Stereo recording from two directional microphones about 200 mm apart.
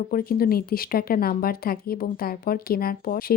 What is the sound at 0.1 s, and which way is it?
Speech, 45° left (ahead or behind).